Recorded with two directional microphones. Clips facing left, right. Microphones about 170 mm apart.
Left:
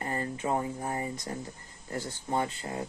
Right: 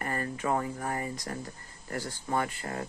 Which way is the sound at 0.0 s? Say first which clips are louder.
Even; 20° left (ahead or behind).